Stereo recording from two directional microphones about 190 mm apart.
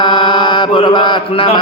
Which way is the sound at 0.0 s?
25° left (ahead or behind).